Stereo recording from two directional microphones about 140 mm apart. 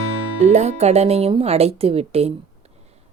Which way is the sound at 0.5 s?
50° right (ahead or behind).